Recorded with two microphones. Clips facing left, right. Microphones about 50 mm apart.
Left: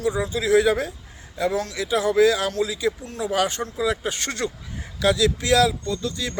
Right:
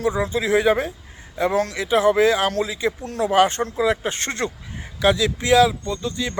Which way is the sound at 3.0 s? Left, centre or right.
Right.